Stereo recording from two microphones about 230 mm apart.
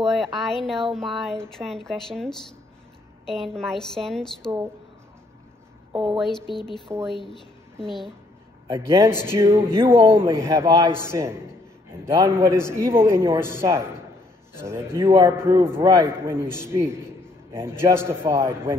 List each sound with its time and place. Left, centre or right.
0.0 s speech: centre
7.1 s speech: centre
8.6 s a man's voice: centre